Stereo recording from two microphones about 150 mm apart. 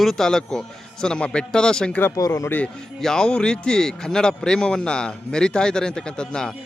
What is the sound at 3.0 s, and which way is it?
Speech, 5° left (ahead or behind).